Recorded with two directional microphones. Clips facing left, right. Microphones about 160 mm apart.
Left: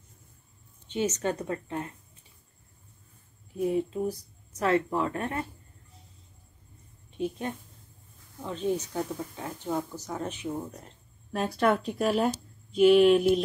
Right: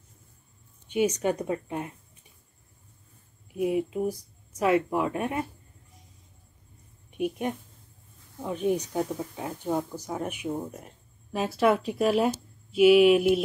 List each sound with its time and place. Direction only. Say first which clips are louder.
0.8 s speech: right 4 dB; 10° right (ahead or behind)
3.5 s speech: right 1 dB; 10° right (ahead or behind)
7.1 s speech: right 3 dB; 15° right (ahead or behind)
11.3 s speech: right 2 dB; 5° right (ahead or behind)